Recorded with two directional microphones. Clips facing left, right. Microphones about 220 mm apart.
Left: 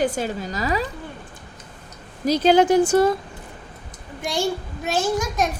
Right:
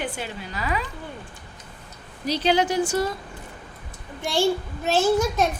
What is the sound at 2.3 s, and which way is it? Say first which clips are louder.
Speech: left 6 dB; 45° left (ahead or behind).